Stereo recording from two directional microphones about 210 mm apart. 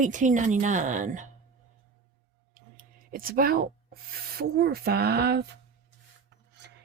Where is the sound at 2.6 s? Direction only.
40° right (ahead or behind).